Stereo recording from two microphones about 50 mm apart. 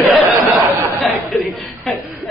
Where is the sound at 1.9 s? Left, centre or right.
Centre.